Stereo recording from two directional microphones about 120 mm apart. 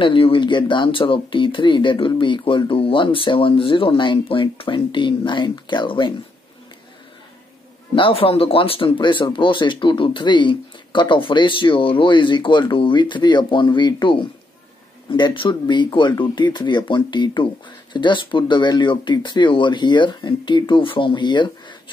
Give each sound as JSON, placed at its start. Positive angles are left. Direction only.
{"t": 0.0, "sound": "speech", "side_deg": 45}
{"t": 7.9, "sound": "speech", "side_deg": 50}